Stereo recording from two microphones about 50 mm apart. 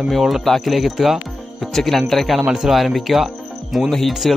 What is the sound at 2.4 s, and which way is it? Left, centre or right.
Speech, centre.